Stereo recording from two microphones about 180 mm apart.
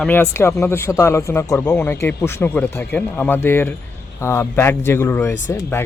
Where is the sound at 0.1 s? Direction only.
15° left (ahead or behind).